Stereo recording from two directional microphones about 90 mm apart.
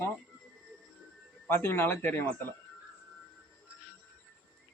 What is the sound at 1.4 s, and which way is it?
Speech, 25° left (ahead or behind).